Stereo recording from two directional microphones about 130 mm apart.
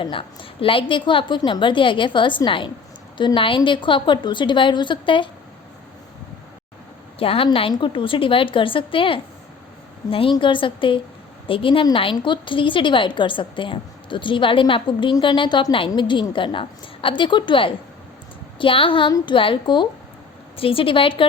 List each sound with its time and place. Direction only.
0.0 s a woman's voice: 40° left (ahead or behind)
7.2 s a woman's voice: 45° left (ahead or behind)